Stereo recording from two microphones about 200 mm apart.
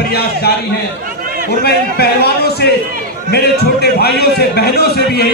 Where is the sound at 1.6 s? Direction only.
50° left (ahead or behind).